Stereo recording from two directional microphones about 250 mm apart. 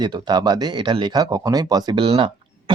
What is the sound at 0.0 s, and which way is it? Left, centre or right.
Speech, centre.